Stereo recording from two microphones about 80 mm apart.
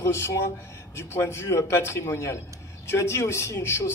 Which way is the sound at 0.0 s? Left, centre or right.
Left.